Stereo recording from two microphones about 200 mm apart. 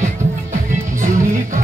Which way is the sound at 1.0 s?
40° right (ahead or behind).